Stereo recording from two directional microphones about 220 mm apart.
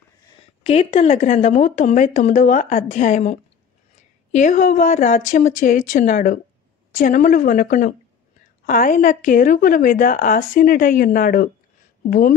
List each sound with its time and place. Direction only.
0.7 s a woman's voice: 25° left (ahead or behind)